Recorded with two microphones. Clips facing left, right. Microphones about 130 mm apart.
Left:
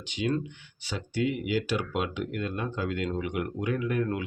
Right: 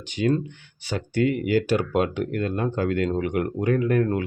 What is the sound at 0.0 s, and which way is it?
Speech, 45° right (ahead or behind).